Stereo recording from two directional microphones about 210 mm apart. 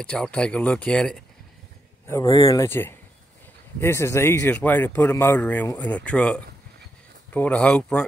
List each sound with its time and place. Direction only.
0.0 s speech: 5° left (ahead or behind)
2.0 s speech: 15° left (ahead or behind)